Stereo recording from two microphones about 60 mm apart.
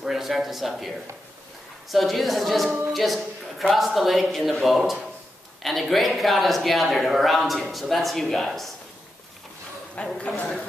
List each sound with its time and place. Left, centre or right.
0.0 s a woman's voice: centre
9.9 s a man's voice: centre